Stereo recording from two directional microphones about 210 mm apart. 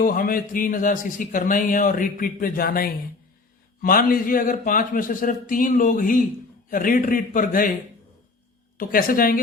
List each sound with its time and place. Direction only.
0.0 s a man's voice: 40° left (ahead or behind)
8.8 s speech: 40° left (ahead or behind)